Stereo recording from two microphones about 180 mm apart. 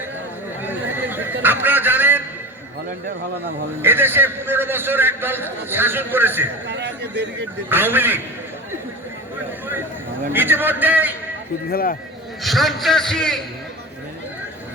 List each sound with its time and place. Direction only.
0.6 s a sound: 10° right (ahead or behind)
3.8 s a man's voice: 10° right (ahead or behind)
6.7 s a sound: 70° right (ahead or behind)
7.7 s a man's voice: 10° right (ahead or behind)
10.3 s a man's voice: 10° right (ahead or behind)
11.7 s a man's voice: 55° left (ahead or behind)
12.4 s a man's voice: centre (ahead or behind)